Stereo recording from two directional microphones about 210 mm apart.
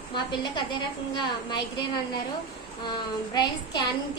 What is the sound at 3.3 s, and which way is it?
Speech, 20° left (ahead or behind).